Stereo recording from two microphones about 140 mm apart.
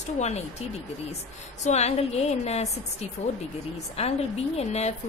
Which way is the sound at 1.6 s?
50° left (ahead or behind).